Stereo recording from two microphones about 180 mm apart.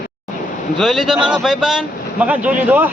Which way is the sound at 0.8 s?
Centre (ahead or behind).